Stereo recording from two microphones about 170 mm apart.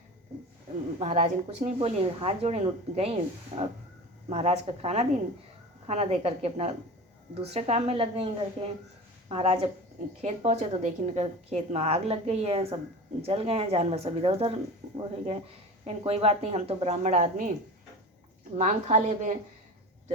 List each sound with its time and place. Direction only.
0.9 s speech: 40° right (ahead or behind)
9.3 s speech: 35° right (ahead or behind)
18.5 s a woman's voice: 45° right (ahead or behind)